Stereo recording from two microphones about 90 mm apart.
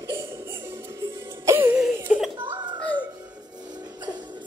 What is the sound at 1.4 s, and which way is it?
Music, 25° right (ahead or behind).